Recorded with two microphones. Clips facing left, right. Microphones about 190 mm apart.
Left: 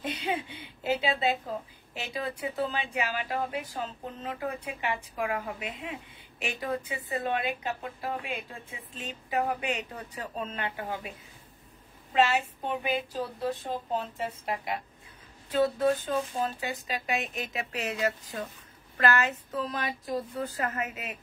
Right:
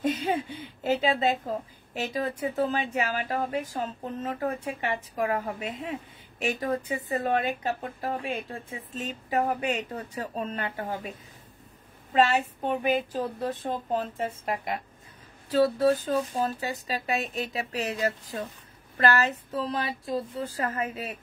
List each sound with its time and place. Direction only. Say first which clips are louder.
0.0 s a sound: right 5 dB; 45° right (ahead or behind)
2.0 s speech: right 5 dB; 40° right (ahead or behind)
15.8 s speech: right 3 dB; 35° right (ahead or behind)